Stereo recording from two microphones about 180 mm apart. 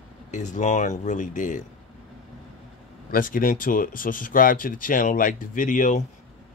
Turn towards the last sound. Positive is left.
turn(degrees=45)  # may be behind; listen again after turning